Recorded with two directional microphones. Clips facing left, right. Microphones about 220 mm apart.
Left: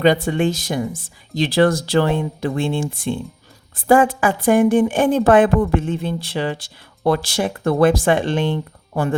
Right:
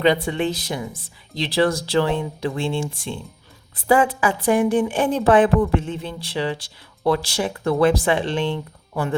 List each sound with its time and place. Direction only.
0.0 s a woman's voice: 45° left (ahead or behind)